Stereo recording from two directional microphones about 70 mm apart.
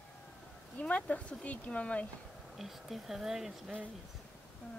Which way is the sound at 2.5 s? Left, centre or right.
Centre.